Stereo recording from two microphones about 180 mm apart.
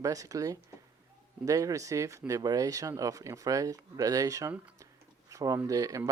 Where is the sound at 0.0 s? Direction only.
20° right (ahead or behind).